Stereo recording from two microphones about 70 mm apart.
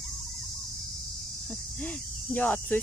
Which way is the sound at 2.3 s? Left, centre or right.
Left.